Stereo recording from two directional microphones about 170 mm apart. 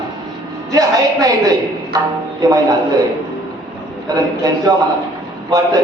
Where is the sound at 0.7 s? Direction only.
20° right (ahead or behind).